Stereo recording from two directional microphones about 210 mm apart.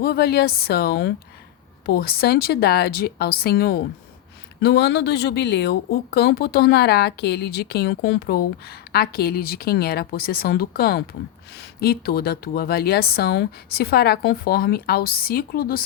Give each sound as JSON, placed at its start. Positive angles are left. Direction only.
{"t": 0.0, "sound": "speech", "side_deg": 50}